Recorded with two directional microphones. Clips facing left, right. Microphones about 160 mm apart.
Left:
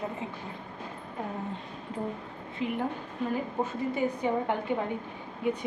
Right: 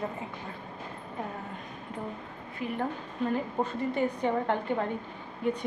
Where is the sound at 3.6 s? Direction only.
10° left (ahead or behind).